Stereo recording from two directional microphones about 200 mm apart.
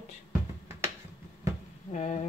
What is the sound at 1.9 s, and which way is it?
Speech, 35° left (ahead or behind).